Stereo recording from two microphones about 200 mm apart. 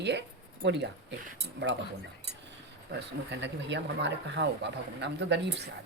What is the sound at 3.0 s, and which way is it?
Speech, 60° right (ahead or behind).